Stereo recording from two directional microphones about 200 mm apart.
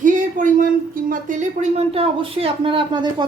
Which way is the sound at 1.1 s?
40° right (ahead or behind).